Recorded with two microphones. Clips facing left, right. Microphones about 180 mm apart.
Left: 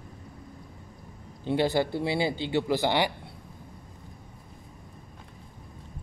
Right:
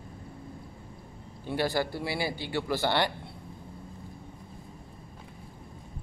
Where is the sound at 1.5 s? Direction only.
20° left (ahead or behind).